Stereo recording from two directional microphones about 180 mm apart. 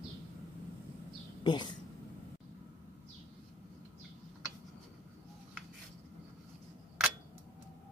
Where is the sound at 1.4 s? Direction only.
25° left (ahead or behind).